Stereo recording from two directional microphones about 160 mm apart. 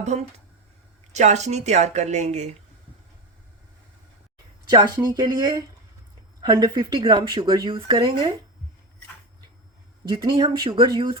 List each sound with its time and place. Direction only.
0.0 s a woman's voice: 45° right (ahead or behind)
4.7 s speech: 25° right (ahead or behind)
10.1 s speech: 30° right (ahead or behind)